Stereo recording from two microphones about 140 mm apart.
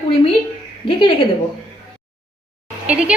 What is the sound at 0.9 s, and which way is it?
Speech, 35° left (ahead or behind).